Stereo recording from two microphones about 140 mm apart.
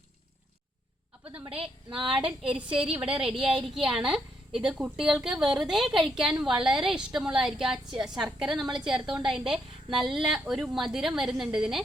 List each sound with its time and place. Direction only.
1.5 s a woman's voice: 40° right (ahead or behind)
2.1 s a woman's voice: 5° right (ahead or behind)
3.3 s a woman's voice: 40° right (ahead or behind)
3.8 s a woman's voice: 5° right (ahead or behind)